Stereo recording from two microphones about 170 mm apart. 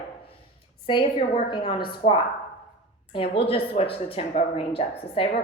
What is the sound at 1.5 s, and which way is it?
A woman's voice, 25° left (ahead or behind).